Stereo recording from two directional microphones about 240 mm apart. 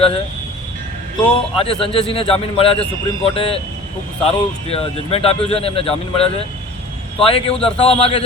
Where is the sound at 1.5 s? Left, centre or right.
Left.